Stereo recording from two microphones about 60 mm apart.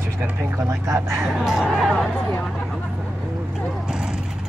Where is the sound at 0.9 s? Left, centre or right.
Right.